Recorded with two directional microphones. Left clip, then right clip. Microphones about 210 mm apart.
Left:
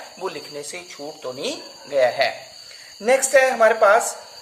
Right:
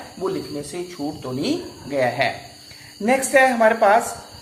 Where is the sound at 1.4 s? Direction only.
50° left (ahead or behind).